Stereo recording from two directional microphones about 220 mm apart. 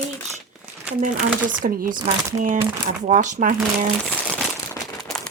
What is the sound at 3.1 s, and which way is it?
Speech, 35° right (ahead or behind).